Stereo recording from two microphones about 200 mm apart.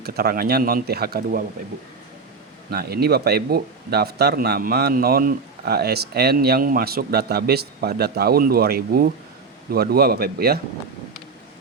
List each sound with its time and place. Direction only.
0.0 s speech: 50° right (ahead or behind)
2.6 s speech: 50° right (ahead or behind)